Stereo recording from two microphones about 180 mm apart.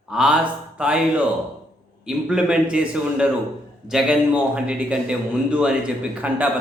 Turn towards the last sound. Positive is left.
turn(degrees=-5)  # may be behind; listen again after turning